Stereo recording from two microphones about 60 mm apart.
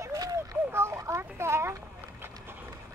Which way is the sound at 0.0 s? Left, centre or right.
Right.